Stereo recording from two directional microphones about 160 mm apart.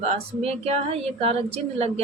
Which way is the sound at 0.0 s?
40° right (ahead or behind).